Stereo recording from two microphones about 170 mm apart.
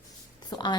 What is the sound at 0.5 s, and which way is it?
Speech, 25° left (ahead or behind).